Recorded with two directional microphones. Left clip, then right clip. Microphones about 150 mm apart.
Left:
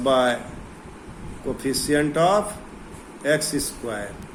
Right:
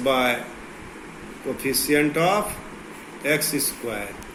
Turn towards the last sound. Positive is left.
turn(degrees=80)